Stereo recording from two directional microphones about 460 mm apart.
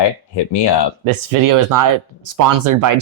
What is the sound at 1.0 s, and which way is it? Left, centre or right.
Speech, right.